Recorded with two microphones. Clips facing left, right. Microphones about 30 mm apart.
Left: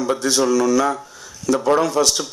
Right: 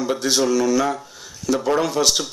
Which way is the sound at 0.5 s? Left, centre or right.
Centre.